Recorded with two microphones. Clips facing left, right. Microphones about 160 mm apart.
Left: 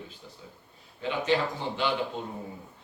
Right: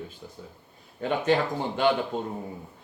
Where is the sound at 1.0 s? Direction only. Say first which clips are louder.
Right 4 dB; 50° right (ahead or behind).